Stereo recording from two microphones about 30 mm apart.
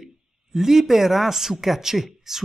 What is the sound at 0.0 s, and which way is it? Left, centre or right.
A man's voice, centre.